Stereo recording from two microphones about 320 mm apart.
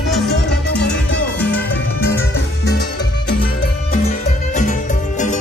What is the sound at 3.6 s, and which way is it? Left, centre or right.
Music, left.